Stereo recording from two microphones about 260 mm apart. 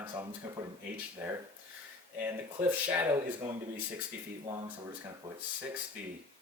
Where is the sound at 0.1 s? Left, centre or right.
Centre.